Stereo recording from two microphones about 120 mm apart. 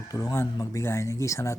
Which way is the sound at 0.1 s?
30° left (ahead or behind).